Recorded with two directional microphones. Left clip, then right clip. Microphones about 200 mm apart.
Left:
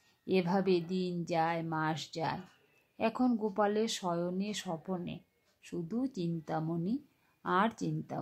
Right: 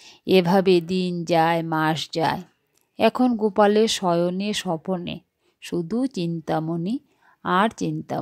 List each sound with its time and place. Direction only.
0.0 s a woman's voice: 45° right (ahead or behind)